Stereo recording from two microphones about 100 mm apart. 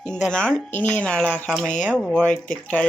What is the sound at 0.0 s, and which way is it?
Speech, 10° left (ahead or behind).